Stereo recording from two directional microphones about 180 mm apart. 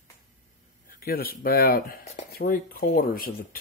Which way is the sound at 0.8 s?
55° left (ahead or behind).